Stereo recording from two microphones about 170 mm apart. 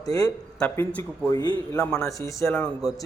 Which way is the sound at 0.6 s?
10° left (ahead or behind).